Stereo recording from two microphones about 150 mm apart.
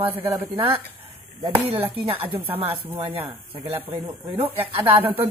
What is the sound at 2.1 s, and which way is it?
Speech, 10° right (ahead or behind).